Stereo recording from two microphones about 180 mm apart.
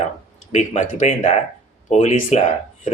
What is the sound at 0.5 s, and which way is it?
Speech, 40° left (ahead or behind).